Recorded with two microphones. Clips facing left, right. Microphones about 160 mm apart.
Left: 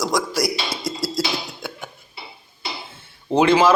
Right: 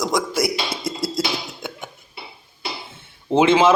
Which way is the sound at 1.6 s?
20° right (ahead or behind).